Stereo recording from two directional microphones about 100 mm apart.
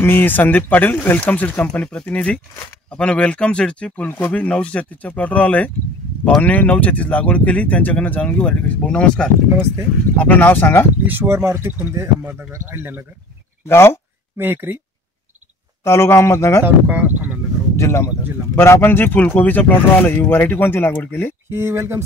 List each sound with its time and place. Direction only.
0.0 s speech: 20° left (ahead or behind)
11.1 s speech: 20° right (ahead or behind)
13.7 s speech: 25° left (ahead or behind)
14.3 s speech: 20° right (ahead or behind)
15.8 s speech: 25° left (ahead or behind)
16.6 s speech: 15° right (ahead or behind)
17.7 s speech: 30° left (ahead or behind)
21.5 s speech: 25° right (ahead or behind)